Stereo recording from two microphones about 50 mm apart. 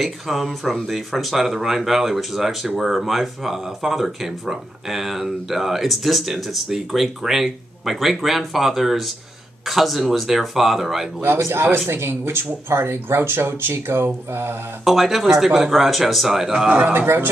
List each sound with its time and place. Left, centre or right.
0.0 s speech: centre
11.2 s speech: right
14.9 s speech: centre
16.6 s speech: centre
16.9 s speech: right